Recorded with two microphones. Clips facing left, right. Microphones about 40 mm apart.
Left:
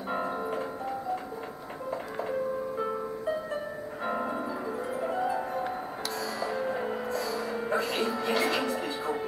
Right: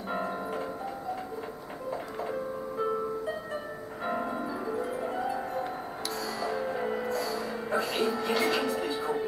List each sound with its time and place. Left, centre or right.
0.1 s music: centre
1.9 s music: centre
4.0 s music: centre